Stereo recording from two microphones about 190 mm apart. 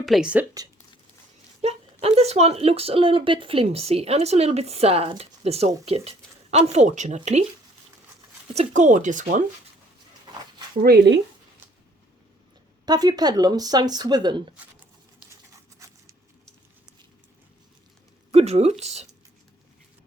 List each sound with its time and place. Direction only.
0.0 s speech: centre (ahead or behind)
1.6 s speech: 30° right (ahead or behind)
8.5 s speech: 40° right (ahead or behind)
10.8 s speech: 60° right (ahead or behind)
12.8 s speech: 20° right (ahead or behind)
15.8 s a sound: 15° right (ahead or behind)
18.3 s a woman's voice: 35° right (ahead or behind)